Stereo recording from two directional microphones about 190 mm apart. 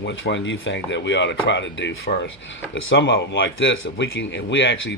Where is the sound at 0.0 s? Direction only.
70° left (ahead or behind).